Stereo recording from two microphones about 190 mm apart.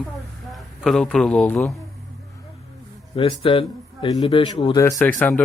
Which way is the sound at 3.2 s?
25° left (ahead or behind).